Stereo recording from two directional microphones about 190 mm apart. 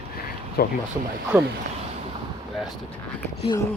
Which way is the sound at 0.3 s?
55° left (ahead or behind).